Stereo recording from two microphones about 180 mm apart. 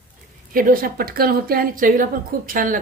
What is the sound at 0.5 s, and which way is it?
A woman's voice, 50° right (ahead or behind).